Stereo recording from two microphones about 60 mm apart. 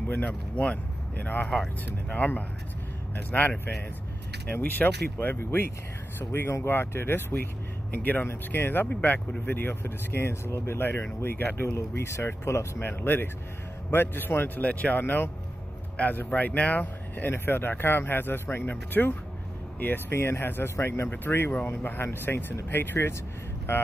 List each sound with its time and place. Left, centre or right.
0.1 s speech: left
1.5 s speech: centre
2.1 s speech: left
13.0 s speech: left
14.6 s speech: left